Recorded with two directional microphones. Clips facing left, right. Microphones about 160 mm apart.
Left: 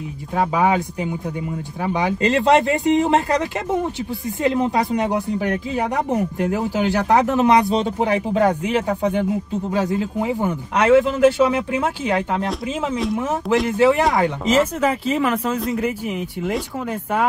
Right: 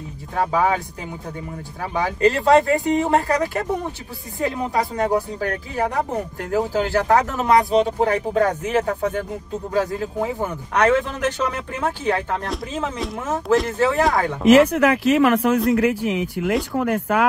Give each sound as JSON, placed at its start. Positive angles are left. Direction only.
{"t": 0.4, "sound": "speech", "side_deg": 15}
{"t": 2.0, "sound": "speech", "side_deg": 20}
{"t": 12.9, "sound": "speech", "side_deg": 0}
{"t": 13.7, "sound": "speech", "side_deg": 15}
{"t": 14.5, "sound": "speech", "side_deg": -70}